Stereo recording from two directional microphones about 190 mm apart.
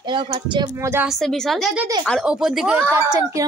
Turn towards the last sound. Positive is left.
turn(degrees=-20)  # may be behind; listen again after turning